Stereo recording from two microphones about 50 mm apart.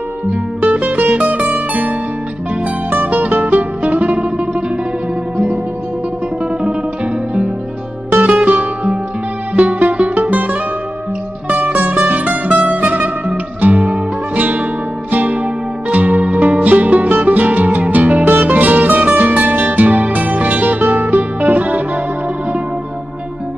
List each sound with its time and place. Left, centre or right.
0.3 s music: right
2.9 s music: right
8.3 s music: right